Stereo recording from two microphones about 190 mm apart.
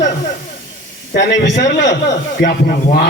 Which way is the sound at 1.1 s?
60° left (ahead or behind).